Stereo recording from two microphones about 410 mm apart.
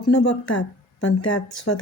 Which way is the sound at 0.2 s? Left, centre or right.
Left.